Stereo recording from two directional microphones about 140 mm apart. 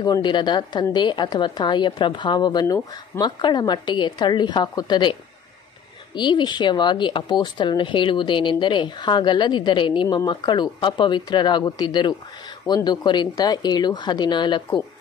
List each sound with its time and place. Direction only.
0.0 s a woman's voice: 30° left (ahead or behind)
6.1 s a woman's voice: 35° left (ahead or behind)